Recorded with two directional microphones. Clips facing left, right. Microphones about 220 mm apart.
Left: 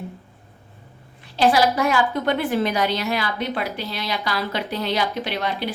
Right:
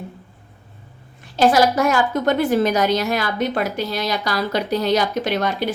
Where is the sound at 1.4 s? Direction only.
45° right (ahead or behind).